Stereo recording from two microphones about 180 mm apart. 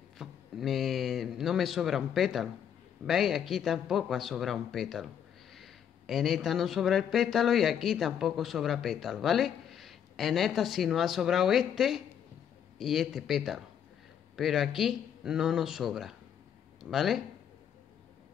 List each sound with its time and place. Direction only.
0.2 s a man's voice: centre (ahead or behind)